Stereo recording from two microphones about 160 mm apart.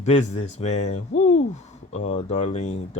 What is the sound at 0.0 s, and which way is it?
Speech, 45° left (ahead or behind).